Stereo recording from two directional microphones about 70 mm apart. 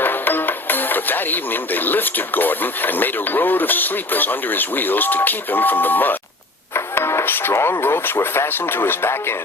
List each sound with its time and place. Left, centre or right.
0.0 s speech: left
6.7 s speech: left